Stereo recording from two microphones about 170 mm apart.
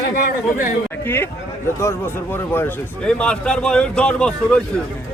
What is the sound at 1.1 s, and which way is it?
Speech, 10° left (ahead or behind).